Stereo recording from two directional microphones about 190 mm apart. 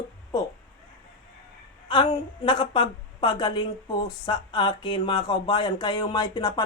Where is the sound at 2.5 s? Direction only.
25° left (ahead or behind).